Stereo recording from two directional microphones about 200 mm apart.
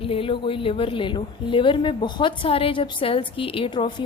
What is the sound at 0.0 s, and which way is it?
A woman's voice, 25° left (ahead or behind).